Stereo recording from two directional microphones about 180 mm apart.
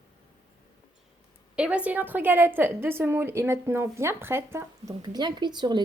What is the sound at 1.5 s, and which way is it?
A woman's voice, 5° right (ahead or behind).